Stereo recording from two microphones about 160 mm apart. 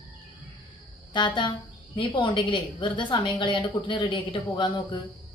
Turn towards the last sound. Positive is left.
turn(degrees=30)  # may be behind; listen again after turning